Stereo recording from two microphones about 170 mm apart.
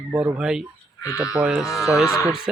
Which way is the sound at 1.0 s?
20° left (ahead or behind).